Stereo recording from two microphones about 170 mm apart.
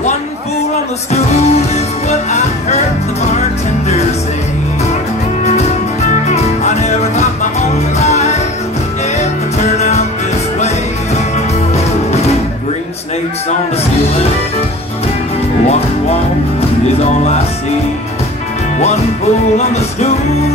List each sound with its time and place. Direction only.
1.1 s music: 40° left (ahead or behind)
6.2 s music: 40° left (ahead or behind)
11.7 s music: 40° left (ahead or behind)
19.5 s music: 40° left (ahead or behind)